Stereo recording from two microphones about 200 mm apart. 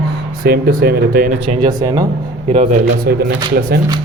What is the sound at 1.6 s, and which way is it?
Speech, 20° right (ahead or behind).